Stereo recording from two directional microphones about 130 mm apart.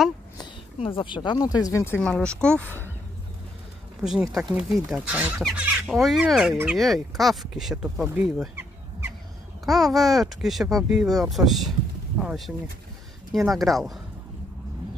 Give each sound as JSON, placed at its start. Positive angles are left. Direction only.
{"t": 0.7, "sound": "speech", "side_deg": 45}
{"t": 2.0, "sound": "speech", "side_deg": 5}
{"t": 4.3, "sound": "speech", "side_deg": 0}
{"t": 9.7, "sound": "speech", "side_deg": 0}